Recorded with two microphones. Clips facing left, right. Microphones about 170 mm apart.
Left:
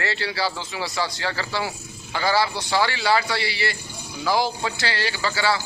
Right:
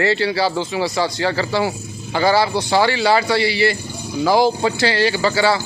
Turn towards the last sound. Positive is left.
turn(degrees=-20)  # may be behind; listen again after turning